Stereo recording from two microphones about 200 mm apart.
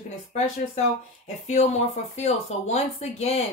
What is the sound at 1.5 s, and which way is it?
Speech, 35° left (ahead or behind).